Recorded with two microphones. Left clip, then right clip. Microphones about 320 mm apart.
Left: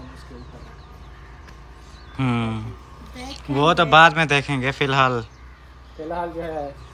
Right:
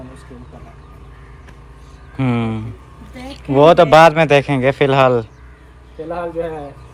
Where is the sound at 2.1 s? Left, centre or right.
Centre.